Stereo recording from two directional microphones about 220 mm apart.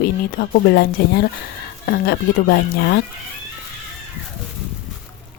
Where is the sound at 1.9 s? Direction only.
45° left (ahead or behind).